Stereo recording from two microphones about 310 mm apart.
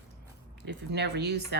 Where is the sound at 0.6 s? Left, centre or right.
Right.